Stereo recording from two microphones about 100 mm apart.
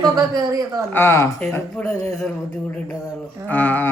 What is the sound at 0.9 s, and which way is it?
Speech, 25° left (ahead or behind).